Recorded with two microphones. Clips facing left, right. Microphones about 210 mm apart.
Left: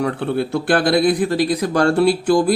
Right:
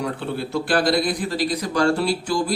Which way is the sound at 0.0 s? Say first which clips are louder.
Left 6 dB; 60° left (ahead or behind).